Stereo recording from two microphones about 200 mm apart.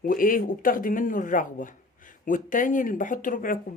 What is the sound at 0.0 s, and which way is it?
Speech, 45° left (ahead or behind).